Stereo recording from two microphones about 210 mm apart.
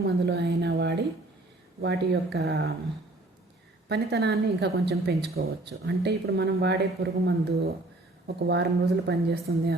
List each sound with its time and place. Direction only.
0.0 s speech: 50° right (ahead or behind)
3.8 s speech: 55° right (ahead or behind)